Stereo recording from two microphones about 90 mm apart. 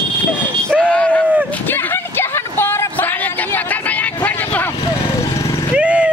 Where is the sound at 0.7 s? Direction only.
15° left (ahead or behind).